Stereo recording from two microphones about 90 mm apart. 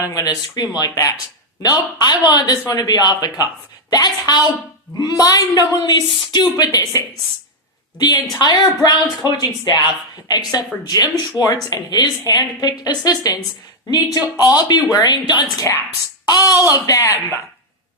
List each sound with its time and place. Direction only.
0.1 s speech: 40° left (ahead or behind)
1.6 s speech: 50° left (ahead or behind)
8.4 s speech: 50° left (ahead or behind)
11.4 s speech: 20° right (ahead or behind)
11.7 s speech: 45° left (ahead or behind)